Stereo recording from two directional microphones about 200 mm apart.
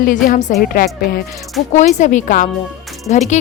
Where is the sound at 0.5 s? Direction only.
50° left (ahead or behind).